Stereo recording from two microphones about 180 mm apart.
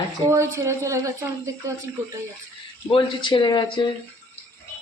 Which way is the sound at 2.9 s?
30° left (ahead or behind).